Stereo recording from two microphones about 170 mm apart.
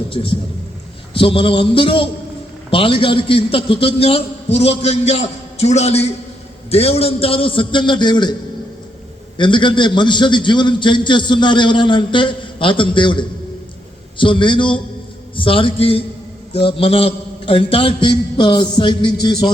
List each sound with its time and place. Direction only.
0.1 s a man's voice: 30° left (ahead or behind)
9.4 s a man's voice: 30° left (ahead or behind)